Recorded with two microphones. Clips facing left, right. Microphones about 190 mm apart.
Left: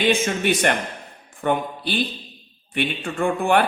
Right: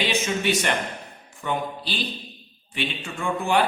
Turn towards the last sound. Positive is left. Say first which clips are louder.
# left 5 dB
turn(degrees=55)  # may be behind; listen again after turning